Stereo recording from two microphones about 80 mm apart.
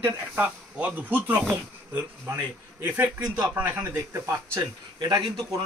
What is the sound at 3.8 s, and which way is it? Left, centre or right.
Speech, right.